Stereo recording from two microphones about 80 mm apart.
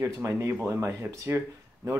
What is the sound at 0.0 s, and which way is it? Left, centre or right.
Speech, right.